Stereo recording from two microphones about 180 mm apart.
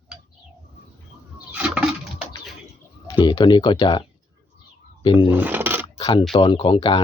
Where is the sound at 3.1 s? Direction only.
25° left (ahead or behind).